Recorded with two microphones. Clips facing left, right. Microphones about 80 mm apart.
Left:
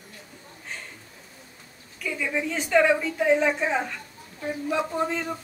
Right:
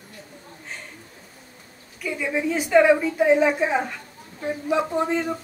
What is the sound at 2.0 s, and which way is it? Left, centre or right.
A woman's voice, centre.